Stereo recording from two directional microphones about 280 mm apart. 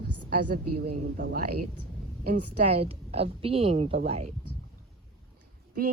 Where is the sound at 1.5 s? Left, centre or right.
Right.